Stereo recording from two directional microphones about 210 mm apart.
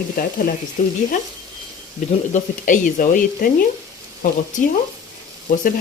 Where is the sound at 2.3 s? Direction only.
40° left (ahead or behind).